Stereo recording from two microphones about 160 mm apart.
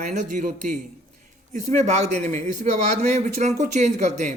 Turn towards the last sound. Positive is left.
turn(degrees=-45)  # may be behind; listen again after turning